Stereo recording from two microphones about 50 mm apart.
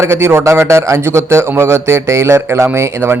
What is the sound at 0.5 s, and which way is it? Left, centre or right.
Speech, right.